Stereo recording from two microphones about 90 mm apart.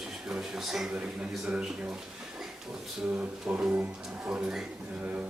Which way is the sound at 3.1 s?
15° right (ahead or behind).